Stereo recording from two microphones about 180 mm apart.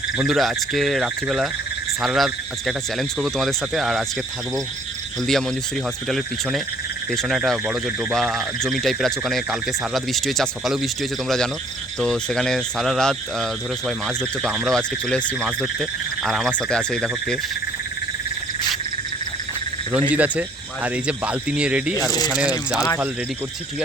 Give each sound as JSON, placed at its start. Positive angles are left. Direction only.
{"t": 0.2, "sound": "speech", "side_deg": 0}
{"t": 5.2, "sound": "speech", "side_deg": 0}
{"t": 20.1, "sound": "speech", "side_deg": -10}
{"t": 22.4, "sound": "speech", "side_deg": 20}